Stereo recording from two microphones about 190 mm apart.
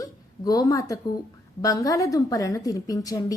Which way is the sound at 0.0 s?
20° left (ahead or behind).